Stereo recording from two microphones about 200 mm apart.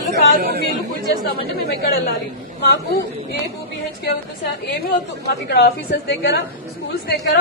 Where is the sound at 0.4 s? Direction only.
50° right (ahead or behind).